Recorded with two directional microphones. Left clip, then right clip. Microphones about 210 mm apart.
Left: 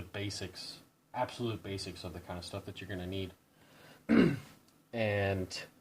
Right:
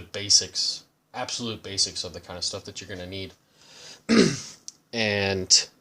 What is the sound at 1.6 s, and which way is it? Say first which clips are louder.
Speech: right 14 dB; 45° right (ahead or behind).